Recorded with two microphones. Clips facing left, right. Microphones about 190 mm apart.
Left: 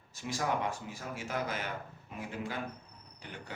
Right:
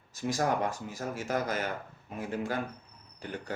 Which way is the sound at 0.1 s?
40° right (ahead or behind).